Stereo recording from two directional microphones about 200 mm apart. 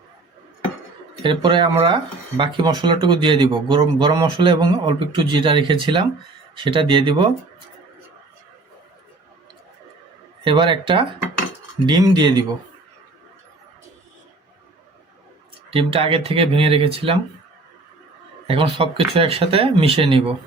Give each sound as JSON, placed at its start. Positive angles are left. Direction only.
{"t": 1.2, "sound": "speech", "side_deg": -25}
{"t": 10.4, "sound": "speech", "side_deg": -25}
{"t": 15.7, "sound": "speech", "side_deg": -25}
{"t": 18.4, "sound": "speech", "side_deg": -25}